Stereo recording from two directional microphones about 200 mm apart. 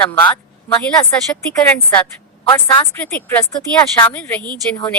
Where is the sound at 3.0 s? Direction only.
10° left (ahead or behind).